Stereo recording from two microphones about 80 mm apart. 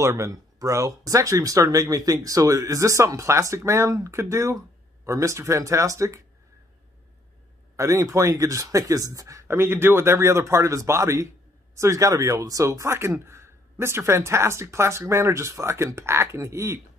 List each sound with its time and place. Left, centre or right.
0.0 s speech: right
7.7 s speech: right